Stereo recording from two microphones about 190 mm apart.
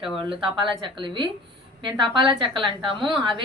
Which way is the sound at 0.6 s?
25° right (ahead or behind).